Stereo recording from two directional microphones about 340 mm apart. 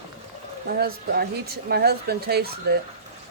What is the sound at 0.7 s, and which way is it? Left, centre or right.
Speech, right.